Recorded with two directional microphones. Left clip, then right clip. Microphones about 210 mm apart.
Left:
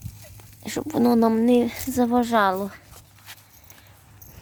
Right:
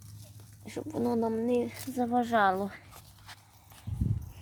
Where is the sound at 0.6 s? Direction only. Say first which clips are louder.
Left 10 dB; 35° left (ahead or behind).